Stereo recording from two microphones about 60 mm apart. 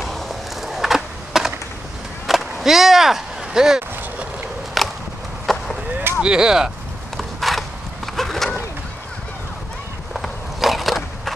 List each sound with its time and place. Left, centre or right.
0.0 s skateboard: centre
2.2 s chop: centre
5.5 s skateboard: centre
6.2 s speech: centre
7.2 s a sound: centre
10.1 s skateboard: centre